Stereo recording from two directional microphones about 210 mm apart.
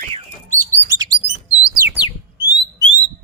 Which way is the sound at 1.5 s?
5° right (ahead or behind).